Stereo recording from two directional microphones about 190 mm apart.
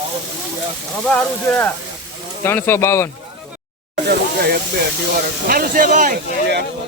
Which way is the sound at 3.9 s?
55° right (ahead or behind).